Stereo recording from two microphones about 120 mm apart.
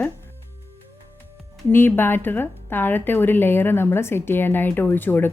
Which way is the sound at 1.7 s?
20° left (ahead or behind).